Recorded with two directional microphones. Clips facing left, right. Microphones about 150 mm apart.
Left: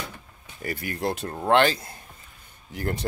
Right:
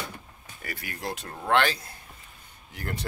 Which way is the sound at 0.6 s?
35° left (ahead or behind).